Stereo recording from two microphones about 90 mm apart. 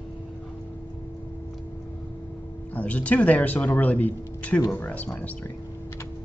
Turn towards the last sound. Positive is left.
turn(degrees=15)  # may be behind; listen again after turning